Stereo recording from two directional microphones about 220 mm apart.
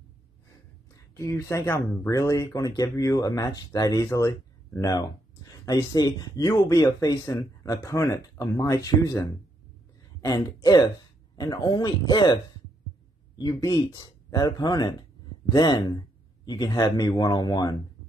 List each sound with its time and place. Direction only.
0.9 s speech: 15° left (ahead or behind)